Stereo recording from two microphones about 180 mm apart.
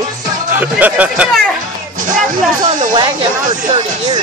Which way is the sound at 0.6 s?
10° right (ahead or behind).